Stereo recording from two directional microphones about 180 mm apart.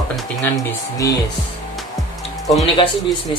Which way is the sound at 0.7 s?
20° left (ahead or behind).